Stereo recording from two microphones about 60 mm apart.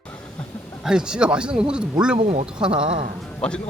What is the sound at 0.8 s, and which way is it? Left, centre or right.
Speech, centre.